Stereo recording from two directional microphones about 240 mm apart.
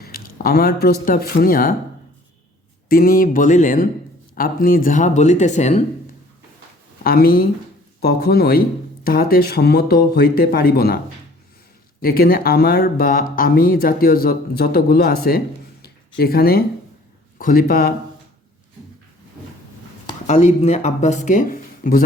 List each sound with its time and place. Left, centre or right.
0.0 s speech: left
2.9 s speech: left
7.0 s speech: left
12.0 s speech: left
20.2 s speech: left